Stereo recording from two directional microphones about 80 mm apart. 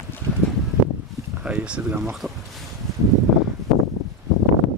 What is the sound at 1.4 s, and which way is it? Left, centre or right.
Speech, centre.